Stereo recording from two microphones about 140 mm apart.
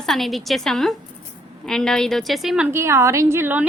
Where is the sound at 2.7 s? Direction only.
20° right (ahead or behind).